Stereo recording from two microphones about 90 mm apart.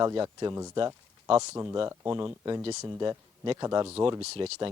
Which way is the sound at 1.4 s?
30° right (ahead or behind).